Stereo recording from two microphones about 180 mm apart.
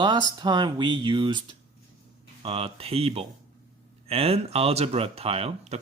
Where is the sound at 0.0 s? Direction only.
25° right (ahead or behind).